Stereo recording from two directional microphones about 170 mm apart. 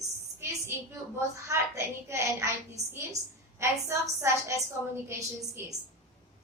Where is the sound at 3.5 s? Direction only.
15° right (ahead or behind).